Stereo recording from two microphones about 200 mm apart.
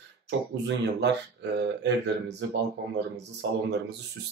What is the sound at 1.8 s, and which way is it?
Speech, 60° right (ahead or behind).